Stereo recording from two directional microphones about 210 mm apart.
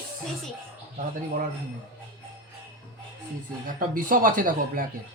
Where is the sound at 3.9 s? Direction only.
40° right (ahead or behind).